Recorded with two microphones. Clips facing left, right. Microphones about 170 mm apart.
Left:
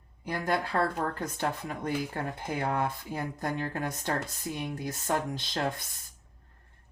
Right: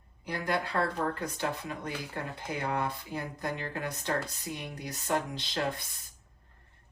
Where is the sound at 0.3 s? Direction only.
45° left (ahead or behind).